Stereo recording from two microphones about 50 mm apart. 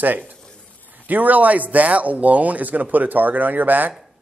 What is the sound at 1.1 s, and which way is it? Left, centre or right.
A man's voice, right.